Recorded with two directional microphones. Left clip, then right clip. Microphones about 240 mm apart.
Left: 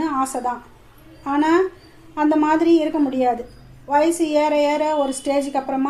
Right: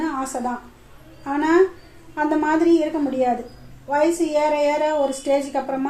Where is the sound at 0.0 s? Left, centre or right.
Left.